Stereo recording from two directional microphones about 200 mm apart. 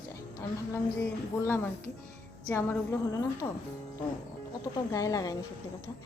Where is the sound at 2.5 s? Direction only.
15° left (ahead or behind).